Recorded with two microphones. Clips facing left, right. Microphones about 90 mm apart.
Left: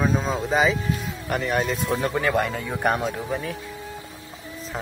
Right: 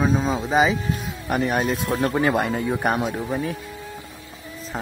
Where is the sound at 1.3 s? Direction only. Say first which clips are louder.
Right 2 dB; 15° right (ahead or behind).